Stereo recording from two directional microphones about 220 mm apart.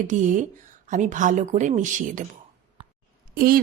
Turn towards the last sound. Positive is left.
turn(degrees=-40)  # may be behind; listen again after turning